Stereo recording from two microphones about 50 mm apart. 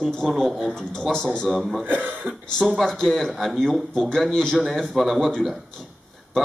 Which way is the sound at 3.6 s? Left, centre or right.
Centre.